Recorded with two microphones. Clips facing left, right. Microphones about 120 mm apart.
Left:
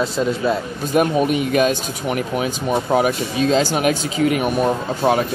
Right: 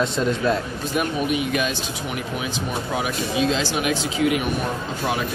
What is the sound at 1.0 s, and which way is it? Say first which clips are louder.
Speech: left 7 dB; 45° left (ahead or behind).